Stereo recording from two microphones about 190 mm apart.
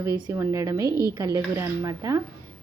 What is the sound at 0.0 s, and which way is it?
A woman's voice, 15° right (ahead or behind).